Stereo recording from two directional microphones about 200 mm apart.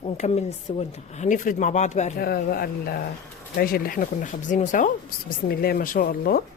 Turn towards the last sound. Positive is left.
turn(degrees=50)  # may be behind; listen again after turning